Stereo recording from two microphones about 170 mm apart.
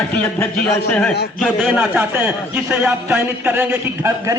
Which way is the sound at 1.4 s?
Centre (ahead or behind).